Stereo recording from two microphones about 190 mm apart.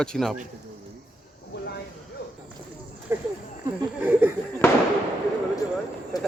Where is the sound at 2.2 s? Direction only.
55° left (ahead or behind).